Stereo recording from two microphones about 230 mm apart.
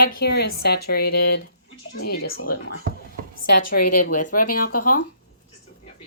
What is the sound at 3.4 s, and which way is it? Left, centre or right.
Speech, left.